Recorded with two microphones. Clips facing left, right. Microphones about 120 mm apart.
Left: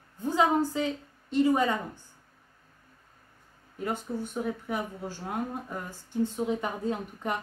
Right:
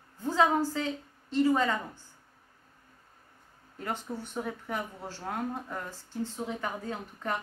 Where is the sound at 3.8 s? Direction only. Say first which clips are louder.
Left 4 dB; 10° left (ahead or behind).